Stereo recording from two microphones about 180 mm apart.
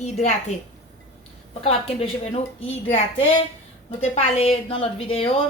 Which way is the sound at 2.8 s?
35° left (ahead or behind).